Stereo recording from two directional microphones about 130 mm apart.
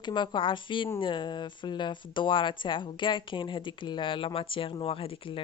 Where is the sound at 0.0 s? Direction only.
40° left (ahead or behind).